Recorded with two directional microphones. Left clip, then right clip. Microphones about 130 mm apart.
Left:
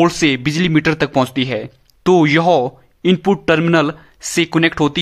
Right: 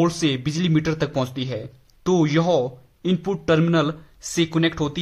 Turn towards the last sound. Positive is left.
turn(degrees=60)  # may be behind; listen again after turning